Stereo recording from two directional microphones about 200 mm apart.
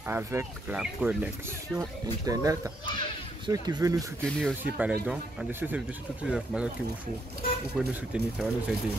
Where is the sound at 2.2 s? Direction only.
15° right (ahead or behind).